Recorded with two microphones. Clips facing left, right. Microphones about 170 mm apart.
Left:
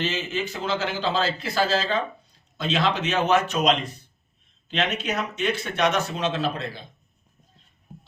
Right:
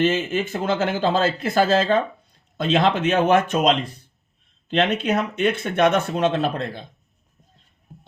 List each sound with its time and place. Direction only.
0.0 s speech: 50° right (ahead or behind)
4.7 s speech: 55° right (ahead or behind)